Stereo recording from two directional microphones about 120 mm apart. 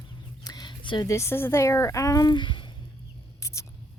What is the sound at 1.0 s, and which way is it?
Speech, 25° left (ahead or behind).